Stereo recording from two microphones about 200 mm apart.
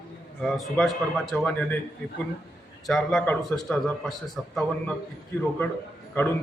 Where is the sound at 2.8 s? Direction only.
Centre (ahead or behind).